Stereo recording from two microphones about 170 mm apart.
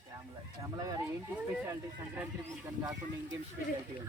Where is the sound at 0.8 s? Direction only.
20° right (ahead or behind).